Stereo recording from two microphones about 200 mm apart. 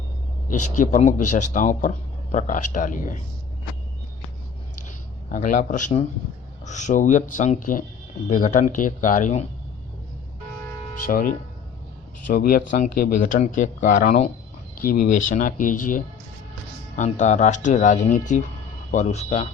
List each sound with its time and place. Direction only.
0.7 s speech: 40° left (ahead or behind)
4.9 s speech: 40° left (ahead or behind)
11.0 s speech: 45° left (ahead or behind)